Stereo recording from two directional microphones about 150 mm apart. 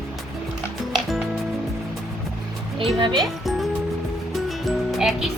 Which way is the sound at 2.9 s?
30° right (ahead or behind).